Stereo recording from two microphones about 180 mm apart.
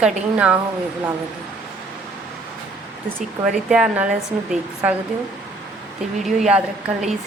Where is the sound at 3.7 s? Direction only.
5° right (ahead or behind).